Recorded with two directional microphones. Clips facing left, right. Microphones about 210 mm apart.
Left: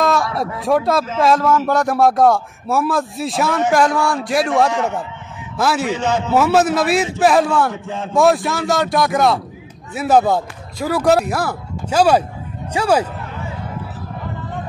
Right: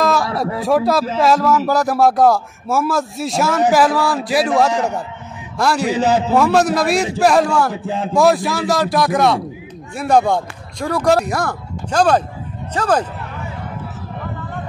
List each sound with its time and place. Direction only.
0.0 s a sound: centre (ahead or behind)
0.7 s speech: centre (ahead or behind)
5.9 s a man's voice: 35° right (ahead or behind)
6.3 s speech: 5° left (ahead or behind)
7.7 s a man's voice: 35° right (ahead or behind)
8.1 s speech: centre (ahead or behind)